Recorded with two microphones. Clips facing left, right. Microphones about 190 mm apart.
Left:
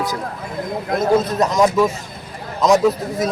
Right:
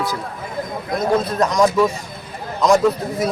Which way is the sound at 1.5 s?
5° left (ahead or behind).